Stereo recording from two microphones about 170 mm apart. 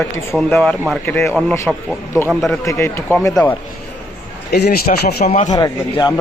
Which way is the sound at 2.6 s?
15° left (ahead or behind).